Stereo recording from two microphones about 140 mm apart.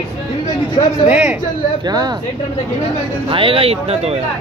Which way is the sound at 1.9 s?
30° right (ahead or behind).